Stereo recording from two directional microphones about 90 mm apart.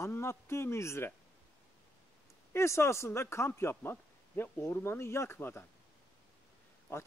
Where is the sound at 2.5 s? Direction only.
30° left (ahead or behind).